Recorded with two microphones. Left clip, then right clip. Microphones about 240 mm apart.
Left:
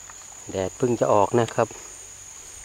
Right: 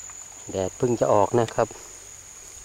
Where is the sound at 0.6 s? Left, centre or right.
Left.